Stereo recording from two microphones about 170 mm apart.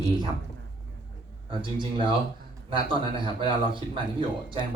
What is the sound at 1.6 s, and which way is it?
A man's voice, 30° right (ahead or behind).